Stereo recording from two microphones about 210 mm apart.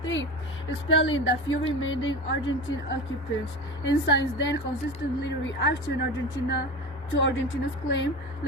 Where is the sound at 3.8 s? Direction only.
60° left (ahead or behind).